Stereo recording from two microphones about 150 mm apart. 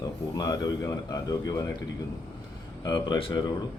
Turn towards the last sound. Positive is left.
turn(degrees=30)  # may be behind; listen again after turning